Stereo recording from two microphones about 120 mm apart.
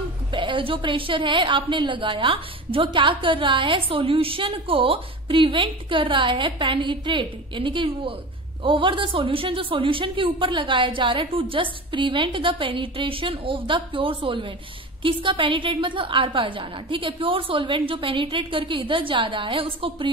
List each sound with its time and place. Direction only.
0.3 s a woman's voice: 40° right (ahead or behind)